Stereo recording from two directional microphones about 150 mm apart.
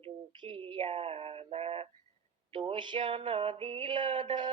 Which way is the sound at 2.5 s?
35° right (ahead or behind).